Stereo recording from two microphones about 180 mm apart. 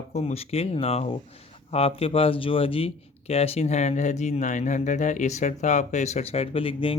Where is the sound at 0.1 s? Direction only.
35° left (ahead or behind).